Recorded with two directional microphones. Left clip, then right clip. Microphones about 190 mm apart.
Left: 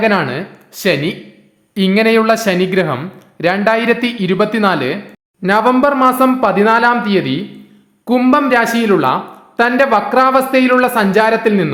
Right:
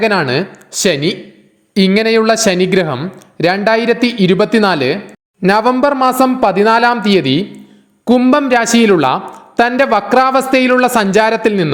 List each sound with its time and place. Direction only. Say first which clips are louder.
0.0 s speech: right 1 dB; 35° right (ahead or behind)